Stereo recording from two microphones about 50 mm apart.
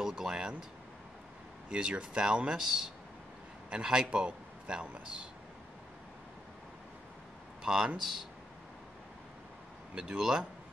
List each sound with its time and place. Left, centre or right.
0.0 s speech: centre
1.7 s speech: centre
2.5 s a man's voice: centre
7.6 s speech: centre
9.9 s speech: centre